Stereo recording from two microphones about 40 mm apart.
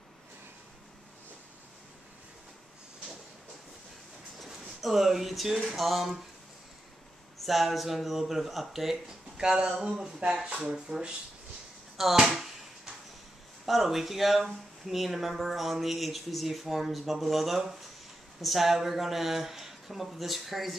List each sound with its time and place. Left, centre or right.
4.4 s a sound: centre
5.6 s speech: centre
7.4 s speech: centre
9.4 s speech: centre
12.0 s a sound: centre
13.7 s speech: centre